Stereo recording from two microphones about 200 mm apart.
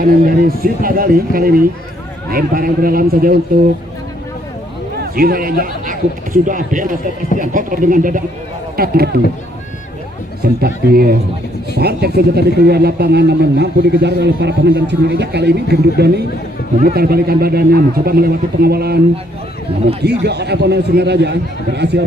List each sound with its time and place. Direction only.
0.3 s a man's voice: 45° right (ahead or behind)
5.1 s a man's voice: 45° right (ahead or behind)
10.4 s a man's voice: 50° right (ahead or behind)
20.0 s speech: 55° right (ahead or behind)